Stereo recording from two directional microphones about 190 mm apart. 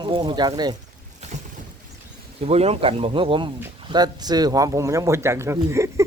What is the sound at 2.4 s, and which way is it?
Speech, 35° right (ahead or behind).